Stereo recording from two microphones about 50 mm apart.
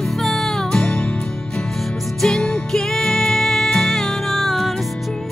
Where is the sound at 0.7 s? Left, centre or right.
Centre.